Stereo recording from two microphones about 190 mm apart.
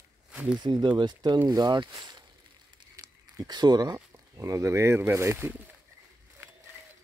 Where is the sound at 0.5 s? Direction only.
20° right (ahead or behind).